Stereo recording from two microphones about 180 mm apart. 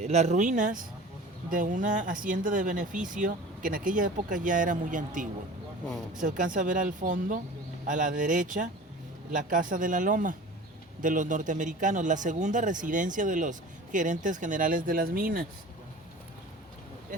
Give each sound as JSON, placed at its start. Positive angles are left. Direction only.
{"t": 0.0, "sound": "speech", "side_deg": -40}